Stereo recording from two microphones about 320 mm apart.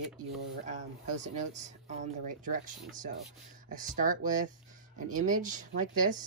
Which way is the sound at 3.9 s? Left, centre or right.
Right.